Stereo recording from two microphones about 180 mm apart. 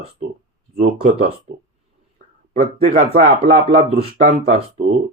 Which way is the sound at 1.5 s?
40° right (ahead or behind).